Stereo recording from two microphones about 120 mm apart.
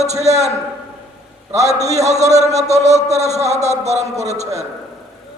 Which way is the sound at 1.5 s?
70° right (ahead or behind).